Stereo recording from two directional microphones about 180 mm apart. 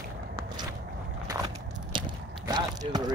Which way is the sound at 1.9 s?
25° right (ahead or behind).